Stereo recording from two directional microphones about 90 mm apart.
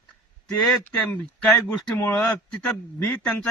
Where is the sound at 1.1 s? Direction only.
10° left (ahead or behind).